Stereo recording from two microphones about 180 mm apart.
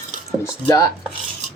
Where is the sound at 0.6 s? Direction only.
20° left (ahead or behind).